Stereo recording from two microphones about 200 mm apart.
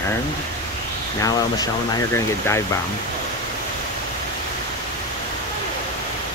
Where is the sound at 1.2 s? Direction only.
20° left (ahead or behind).